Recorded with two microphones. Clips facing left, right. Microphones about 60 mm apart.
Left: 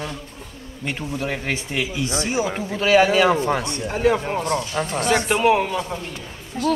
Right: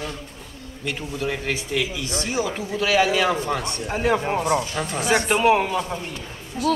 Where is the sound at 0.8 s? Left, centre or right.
Left.